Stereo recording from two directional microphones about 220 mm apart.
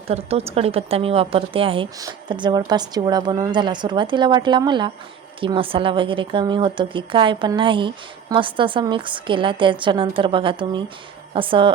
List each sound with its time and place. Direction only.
0.1 s a woman's voice: 30° right (ahead or behind)